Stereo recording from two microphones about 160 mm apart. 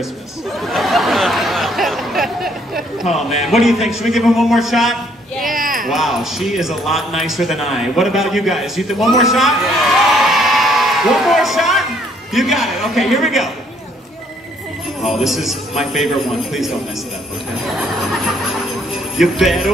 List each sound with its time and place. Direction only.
0.6 s a sound: centre (ahead or behind)
3.3 s speech: centre (ahead or behind)
5.5 s a sound: 60° right (ahead or behind)
5.9 s speech: centre (ahead or behind)
15.0 s speech: centre (ahead or behind)
17.6 s speech: centre (ahead or behind)